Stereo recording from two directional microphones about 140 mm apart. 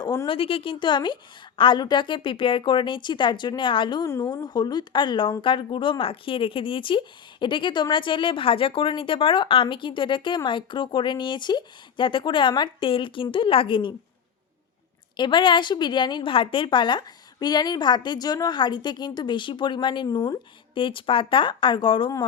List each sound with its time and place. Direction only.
0.0 s a woman's voice: 30° left (ahead or behind)
0.3 s speech: 40° left (ahead or behind)
15.1 s speech: 35° left (ahead or behind)